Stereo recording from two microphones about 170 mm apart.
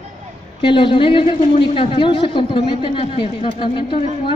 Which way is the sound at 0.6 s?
30° left (ahead or behind).